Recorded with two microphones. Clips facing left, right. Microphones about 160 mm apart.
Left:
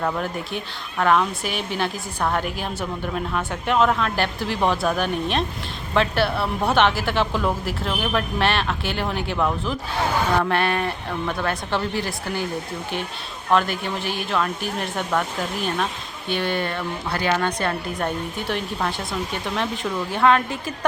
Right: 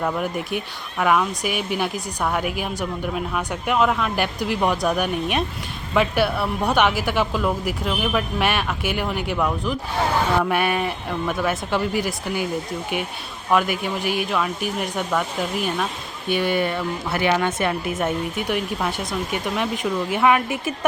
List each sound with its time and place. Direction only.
0.9 s speech: 5° right (ahead or behind)
11.9 s speech: 15° right (ahead or behind)
13.5 s speech: 10° right (ahead or behind)
16.3 s speech: 10° right (ahead or behind)